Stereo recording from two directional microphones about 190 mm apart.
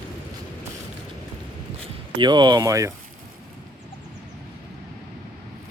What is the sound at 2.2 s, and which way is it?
Speech, 25° right (ahead or behind).